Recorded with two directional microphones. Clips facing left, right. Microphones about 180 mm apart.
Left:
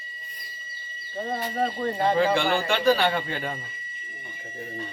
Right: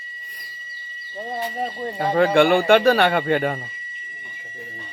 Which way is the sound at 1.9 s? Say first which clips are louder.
Right 6 dB; 65° right (ahead or behind).